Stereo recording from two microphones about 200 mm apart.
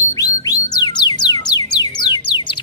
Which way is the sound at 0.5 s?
20° left (ahead or behind).